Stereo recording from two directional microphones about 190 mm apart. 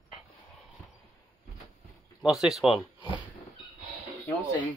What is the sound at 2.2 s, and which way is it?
Speech, centre (ahead or behind).